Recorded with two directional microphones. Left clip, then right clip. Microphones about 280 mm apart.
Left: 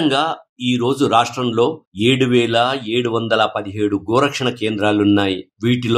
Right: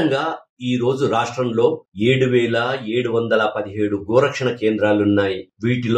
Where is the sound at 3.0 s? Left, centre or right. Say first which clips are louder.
Left 1 dB; left.